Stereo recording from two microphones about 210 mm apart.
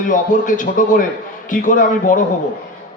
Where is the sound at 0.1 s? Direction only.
40° left (ahead or behind).